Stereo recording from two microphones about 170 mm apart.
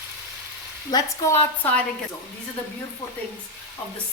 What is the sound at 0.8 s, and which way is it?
Speech, 20° left (ahead or behind).